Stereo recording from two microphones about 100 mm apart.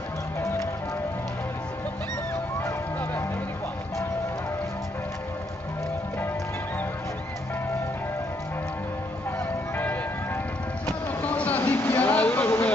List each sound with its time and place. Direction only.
2.6 s music: 25° left (ahead or behind)
9.8 s music: 20° left (ahead or behind)
10.9 s a sound: 15° left (ahead or behind)